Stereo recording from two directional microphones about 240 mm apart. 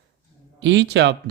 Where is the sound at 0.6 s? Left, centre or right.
Right.